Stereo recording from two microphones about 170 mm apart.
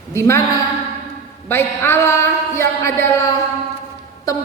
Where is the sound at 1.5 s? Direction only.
15° left (ahead or behind).